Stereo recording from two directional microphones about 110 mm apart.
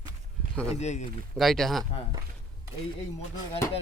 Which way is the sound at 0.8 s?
90° left.